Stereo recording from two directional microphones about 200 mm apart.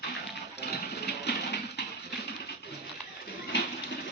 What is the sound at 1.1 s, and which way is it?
Music, 55° left (ahead or behind).